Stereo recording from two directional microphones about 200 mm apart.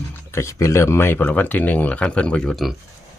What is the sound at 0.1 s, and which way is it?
Speech, 15° left (ahead or behind).